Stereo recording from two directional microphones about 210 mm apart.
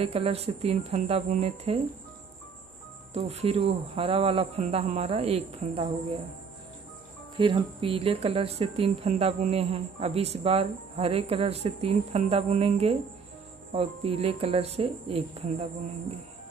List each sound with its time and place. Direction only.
0.0 s speech: 30° right (ahead or behind)
3.1 s speech: 30° right (ahead or behind)
7.3 s speech: 25° right (ahead or behind)